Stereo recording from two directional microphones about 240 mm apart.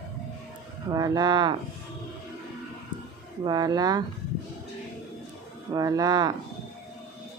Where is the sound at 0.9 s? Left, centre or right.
Centre.